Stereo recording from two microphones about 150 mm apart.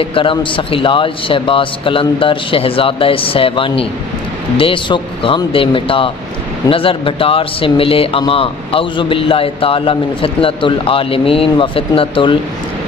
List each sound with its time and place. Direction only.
0.0 s a man's voice: 35° left (ahead or behind)